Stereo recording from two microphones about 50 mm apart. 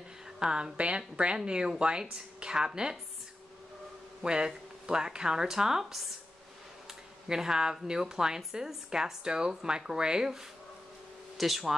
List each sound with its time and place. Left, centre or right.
0.4 s a woman's voice: centre
4.2 s a woman's voice: centre
7.2 s a woman's voice: centre